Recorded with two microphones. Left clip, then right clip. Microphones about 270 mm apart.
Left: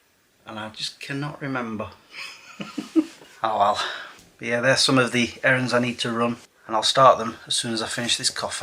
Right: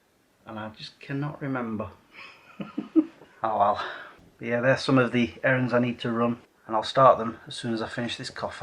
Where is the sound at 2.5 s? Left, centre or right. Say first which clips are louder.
Left 1 dB; centre.